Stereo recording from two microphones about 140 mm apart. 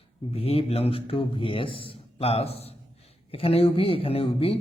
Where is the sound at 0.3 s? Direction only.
45° left (ahead or behind).